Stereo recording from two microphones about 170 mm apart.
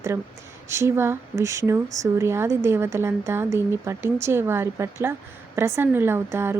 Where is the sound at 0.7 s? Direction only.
15° right (ahead or behind).